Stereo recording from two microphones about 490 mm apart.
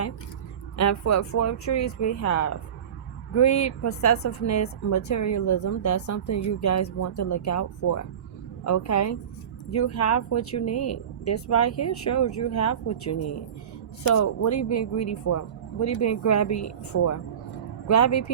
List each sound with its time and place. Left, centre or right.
0.8 s speech: left